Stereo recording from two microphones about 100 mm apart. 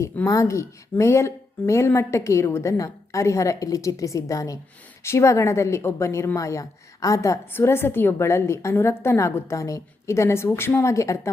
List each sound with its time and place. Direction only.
0.3 s a woman's voice: 30° left (ahead or behind)